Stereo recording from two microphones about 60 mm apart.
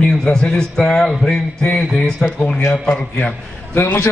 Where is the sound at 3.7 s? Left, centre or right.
Left.